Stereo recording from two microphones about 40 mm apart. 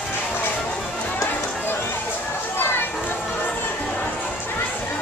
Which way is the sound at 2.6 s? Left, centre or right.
Left.